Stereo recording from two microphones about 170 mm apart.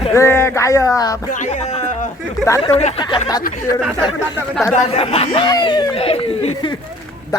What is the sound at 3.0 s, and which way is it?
Speech, 25° left (ahead or behind).